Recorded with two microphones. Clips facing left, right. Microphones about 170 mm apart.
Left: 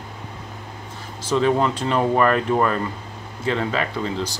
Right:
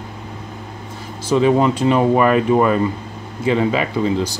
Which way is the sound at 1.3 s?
10° right (ahead or behind).